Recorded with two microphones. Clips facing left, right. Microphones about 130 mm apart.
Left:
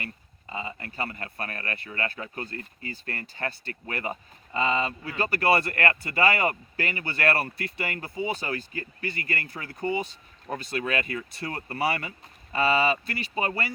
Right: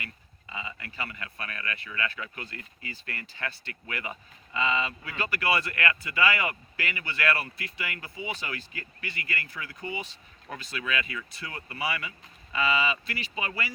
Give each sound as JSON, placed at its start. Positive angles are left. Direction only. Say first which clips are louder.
{"t": 0.0, "sound": "speech", "louder": "left 4 dB", "side_deg": 40}